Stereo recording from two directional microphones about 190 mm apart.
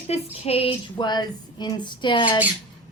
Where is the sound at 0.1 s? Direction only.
30° left (ahead or behind).